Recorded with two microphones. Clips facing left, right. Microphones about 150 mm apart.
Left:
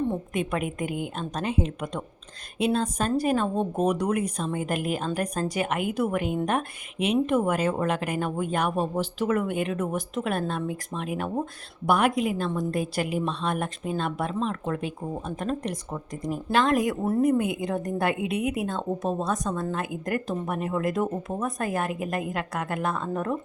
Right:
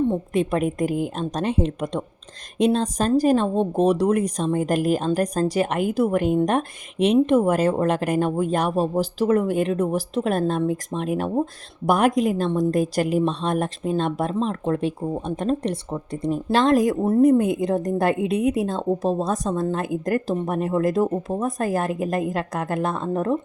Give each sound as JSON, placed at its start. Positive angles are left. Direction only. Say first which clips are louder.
{"t": 0.3, "sound": "speech", "louder": "right 7 dB", "side_deg": -35}